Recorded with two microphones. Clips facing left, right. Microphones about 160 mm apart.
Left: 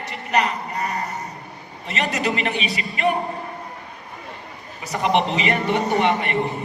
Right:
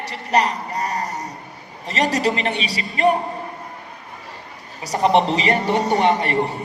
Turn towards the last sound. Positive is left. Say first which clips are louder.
# right 2 dB
turn(degrees=-35)  # may be behind; listen again after turning